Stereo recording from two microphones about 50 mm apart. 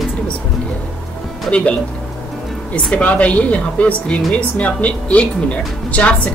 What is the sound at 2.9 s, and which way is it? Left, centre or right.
Speech, left.